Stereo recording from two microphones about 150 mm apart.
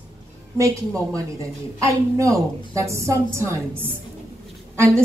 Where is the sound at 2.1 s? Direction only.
20° right (ahead or behind).